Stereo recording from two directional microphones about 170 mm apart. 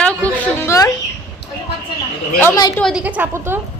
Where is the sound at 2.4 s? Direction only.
20° left (ahead or behind).